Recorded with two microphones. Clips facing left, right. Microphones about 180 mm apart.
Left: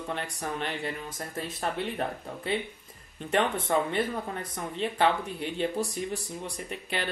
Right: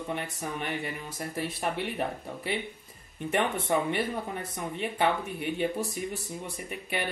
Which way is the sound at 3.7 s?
15° right (ahead or behind).